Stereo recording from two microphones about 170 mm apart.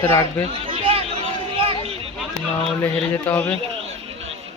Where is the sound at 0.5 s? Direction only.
35° right (ahead or behind).